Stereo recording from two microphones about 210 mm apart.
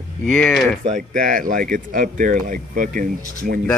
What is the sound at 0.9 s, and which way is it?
Speech, 35° right (ahead or behind).